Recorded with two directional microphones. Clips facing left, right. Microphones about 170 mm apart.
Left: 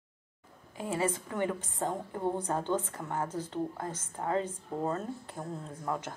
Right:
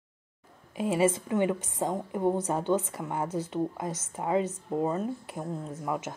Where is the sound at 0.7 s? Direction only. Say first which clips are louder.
Right 6 dB; 20° right (ahead or behind).